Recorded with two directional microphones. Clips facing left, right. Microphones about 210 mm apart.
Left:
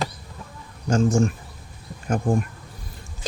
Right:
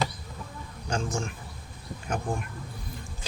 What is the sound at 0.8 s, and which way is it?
Speech, 40° left (ahead or behind).